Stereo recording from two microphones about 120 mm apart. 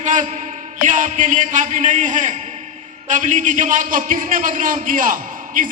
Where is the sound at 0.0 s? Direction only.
90° right.